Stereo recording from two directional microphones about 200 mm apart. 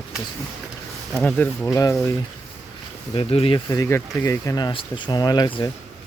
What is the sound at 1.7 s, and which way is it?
Speech, 20° left (ahead or behind).